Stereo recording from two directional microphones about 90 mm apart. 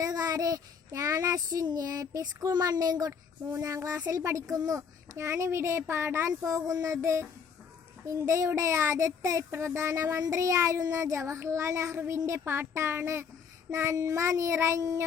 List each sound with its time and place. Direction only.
0.0 s a child's voice: 45° right (ahead or behind)